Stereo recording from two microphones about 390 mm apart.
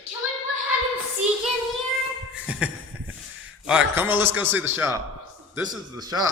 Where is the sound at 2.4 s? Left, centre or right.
Centre.